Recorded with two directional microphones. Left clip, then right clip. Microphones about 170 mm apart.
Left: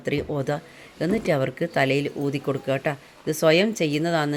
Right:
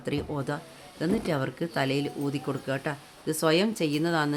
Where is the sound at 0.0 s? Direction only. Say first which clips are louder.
Left 6 dB; 15° left (ahead or behind).